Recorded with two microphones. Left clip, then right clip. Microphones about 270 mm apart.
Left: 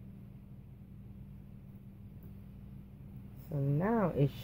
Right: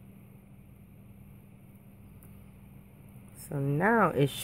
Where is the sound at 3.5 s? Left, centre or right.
Right.